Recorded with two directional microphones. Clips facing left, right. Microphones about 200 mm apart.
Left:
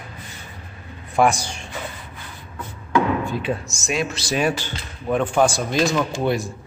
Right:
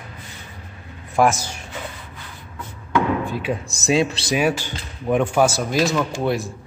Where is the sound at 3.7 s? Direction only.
35° right (ahead or behind).